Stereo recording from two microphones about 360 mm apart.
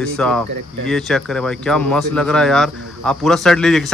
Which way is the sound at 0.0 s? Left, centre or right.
Centre.